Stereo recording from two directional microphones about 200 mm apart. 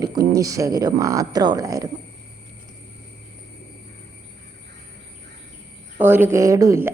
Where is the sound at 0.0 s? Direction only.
20° right (ahead or behind).